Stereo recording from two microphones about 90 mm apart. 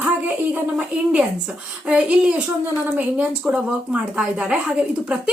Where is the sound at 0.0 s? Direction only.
20° right (ahead or behind).